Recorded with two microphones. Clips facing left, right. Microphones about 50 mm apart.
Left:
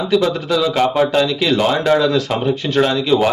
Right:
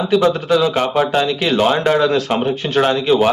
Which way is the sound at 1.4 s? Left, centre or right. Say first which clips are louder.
Right 1 dB; right.